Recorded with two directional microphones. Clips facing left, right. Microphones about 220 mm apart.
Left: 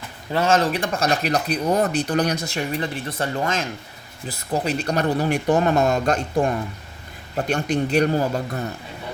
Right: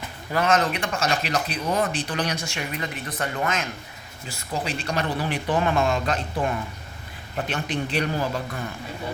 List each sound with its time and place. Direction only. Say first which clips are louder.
0.3 s speech: left 3 dB; 30° left (ahead or behind)
4.3 s speech: left 6 dB; 40° left (ahead or behind)